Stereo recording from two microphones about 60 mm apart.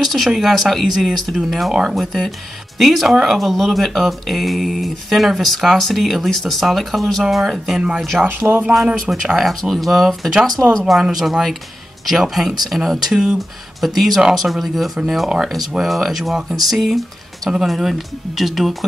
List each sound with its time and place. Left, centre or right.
0.0 s speech: centre
8.3 s speech: right
9.1 s speech: centre